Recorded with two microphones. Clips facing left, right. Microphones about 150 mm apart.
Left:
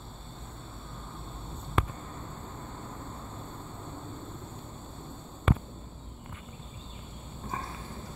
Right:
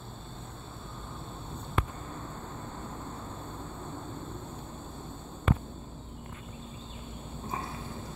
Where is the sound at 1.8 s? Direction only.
90° left.